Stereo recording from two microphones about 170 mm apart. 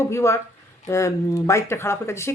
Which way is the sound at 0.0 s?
15° left (ahead or behind).